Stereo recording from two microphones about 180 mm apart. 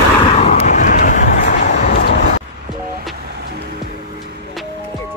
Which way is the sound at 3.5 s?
65° right (ahead or behind).